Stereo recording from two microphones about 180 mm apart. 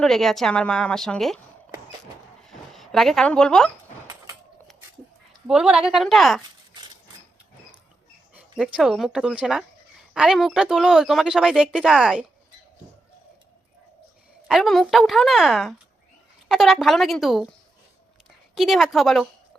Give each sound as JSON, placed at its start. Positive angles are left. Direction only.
{"t": 0.0, "sound": "speech", "side_deg": 0}
{"t": 2.5, "sound": "speech", "side_deg": 0}
{"t": 4.0, "sound": "a sound", "side_deg": -20}
{"t": 5.5, "sound": "speech", "side_deg": -5}
{"t": 8.4, "sound": "speech", "side_deg": -5}
{"t": 14.4, "sound": "speech", "side_deg": 0}
{"t": 18.5, "sound": "speech", "side_deg": 0}